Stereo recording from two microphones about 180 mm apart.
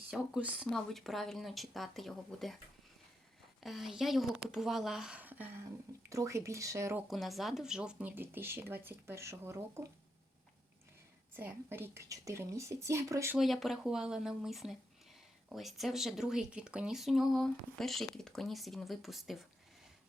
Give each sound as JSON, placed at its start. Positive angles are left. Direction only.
{"t": 0.1, "sound": "speech", "side_deg": -5}
{"t": 3.6, "sound": "speech", "side_deg": 0}
{"t": 7.1, "sound": "speech", "side_deg": 0}
{"t": 11.3, "sound": "speech", "side_deg": -10}
{"t": 13.3, "sound": "speech", "side_deg": 0}